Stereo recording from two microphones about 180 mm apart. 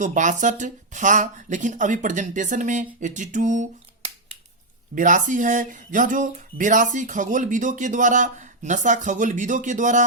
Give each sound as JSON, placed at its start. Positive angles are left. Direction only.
{"t": 0.0, "sound": "speech", "side_deg": -45}